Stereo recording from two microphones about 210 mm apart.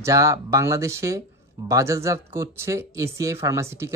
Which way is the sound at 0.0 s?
15° right (ahead or behind).